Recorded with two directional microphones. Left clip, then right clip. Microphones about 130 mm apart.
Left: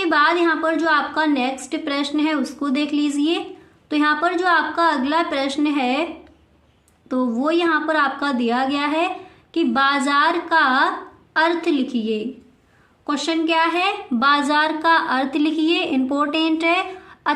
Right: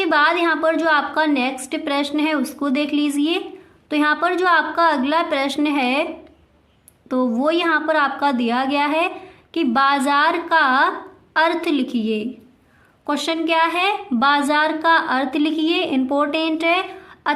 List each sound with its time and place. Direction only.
0.0 s a woman's voice: 30° right (ahead or behind)
7.1 s a woman's voice: 35° right (ahead or behind); by 17.3 s 10° right (ahead or behind)